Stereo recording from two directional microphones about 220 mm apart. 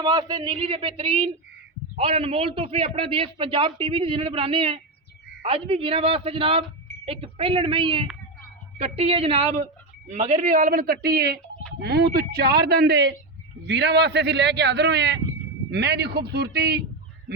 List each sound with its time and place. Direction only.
0.0 s a man's voice: 20° right (ahead or behind); by 16.8 s 45° right (ahead or behind)